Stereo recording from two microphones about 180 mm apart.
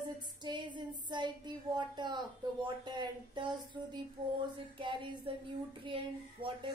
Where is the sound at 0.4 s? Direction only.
25° right (ahead or behind).